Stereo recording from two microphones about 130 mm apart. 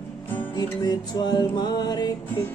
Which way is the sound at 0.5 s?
35° left (ahead or behind).